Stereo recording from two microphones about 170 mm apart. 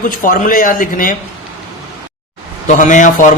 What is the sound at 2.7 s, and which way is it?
Speech, 45° left (ahead or behind).